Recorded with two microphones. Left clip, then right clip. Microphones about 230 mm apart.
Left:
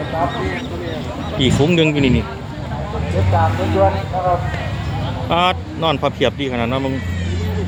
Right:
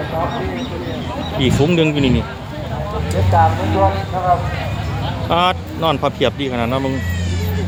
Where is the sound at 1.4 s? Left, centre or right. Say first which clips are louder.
Left 1 dB; centre.